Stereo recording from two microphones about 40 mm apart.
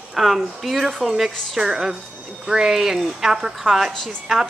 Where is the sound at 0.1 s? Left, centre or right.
Centre.